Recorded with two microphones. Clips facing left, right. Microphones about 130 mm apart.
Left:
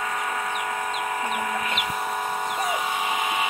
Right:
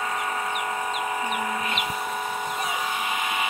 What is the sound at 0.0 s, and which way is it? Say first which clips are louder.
Chicken: even; 5° right (ahead or behind).